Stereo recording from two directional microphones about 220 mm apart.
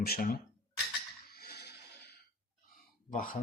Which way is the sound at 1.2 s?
45° left (ahead or behind).